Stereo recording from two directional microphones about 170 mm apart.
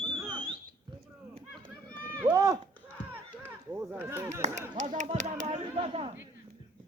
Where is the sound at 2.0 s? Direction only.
15° right (ahead or behind).